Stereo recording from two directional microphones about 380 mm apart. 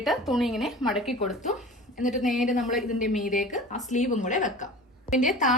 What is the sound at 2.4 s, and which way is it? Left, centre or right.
A woman's voice, centre.